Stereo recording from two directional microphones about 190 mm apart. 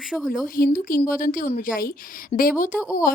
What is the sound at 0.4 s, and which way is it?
A woman's voice, 45° left (ahead or behind).